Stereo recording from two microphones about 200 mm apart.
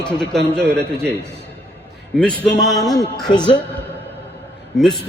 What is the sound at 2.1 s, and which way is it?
Speech, 5° left (ahead or behind).